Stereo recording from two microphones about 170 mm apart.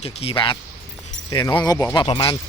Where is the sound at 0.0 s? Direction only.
35° left (ahead or behind).